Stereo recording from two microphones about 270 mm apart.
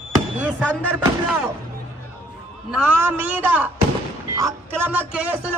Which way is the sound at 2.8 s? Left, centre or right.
Centre.